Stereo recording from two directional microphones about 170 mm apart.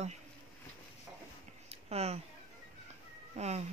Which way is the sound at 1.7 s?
40° right (ahead or behind).